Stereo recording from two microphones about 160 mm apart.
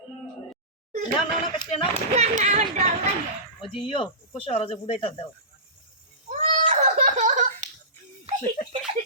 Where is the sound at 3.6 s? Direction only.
30° left (ahead or behind).